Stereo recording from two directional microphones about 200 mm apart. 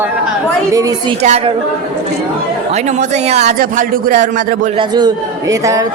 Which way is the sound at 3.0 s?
35° right (ahead or behind).